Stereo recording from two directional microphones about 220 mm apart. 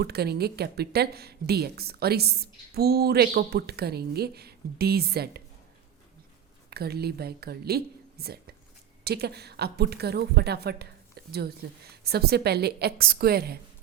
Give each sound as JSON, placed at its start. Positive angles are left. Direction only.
{"t": 0.0, "sound": "speech", "side_deg": -45}
{"t": 6.7, "sound": "speech", "side_deg": -45}